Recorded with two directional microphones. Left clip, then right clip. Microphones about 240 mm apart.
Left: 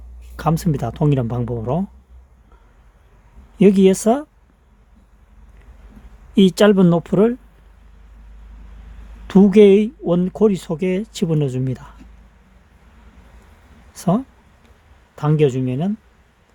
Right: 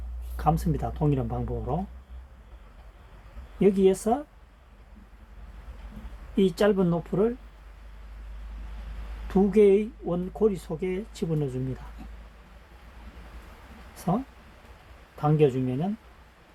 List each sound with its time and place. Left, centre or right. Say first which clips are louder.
0.3 s speech: left 5 dB; left
3.6 s speech: left 8 dB; left
6.3 s speech: left 9 dB; left
9.2 s speech: left 9 dB; left
13.9 s speech: left 8 dB; left